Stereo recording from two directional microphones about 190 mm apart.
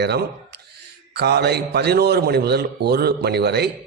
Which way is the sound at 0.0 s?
60° right (ahead or behind).